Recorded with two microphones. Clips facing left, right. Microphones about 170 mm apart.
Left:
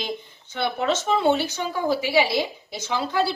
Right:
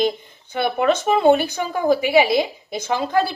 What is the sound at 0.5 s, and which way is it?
A woman's voice, 55° right (ahead or behind).